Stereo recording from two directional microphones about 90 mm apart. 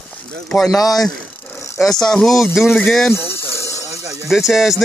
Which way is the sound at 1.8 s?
5° left (ahead or behind).